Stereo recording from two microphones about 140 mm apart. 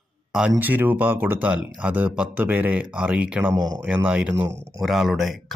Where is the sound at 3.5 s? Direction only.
30° right (ahead or behind).